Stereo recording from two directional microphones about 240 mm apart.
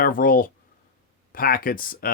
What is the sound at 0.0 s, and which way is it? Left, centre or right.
Speech, left.